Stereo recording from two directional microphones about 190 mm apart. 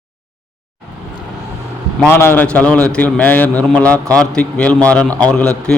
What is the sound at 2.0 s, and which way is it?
A man's voice, 10° left (ahead or behind).